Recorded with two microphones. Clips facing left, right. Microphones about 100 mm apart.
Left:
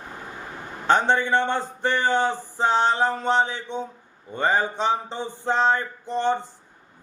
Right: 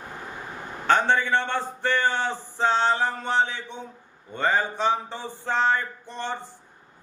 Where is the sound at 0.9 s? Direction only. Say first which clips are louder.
Left 1 dB; 20° left (ahead or behind).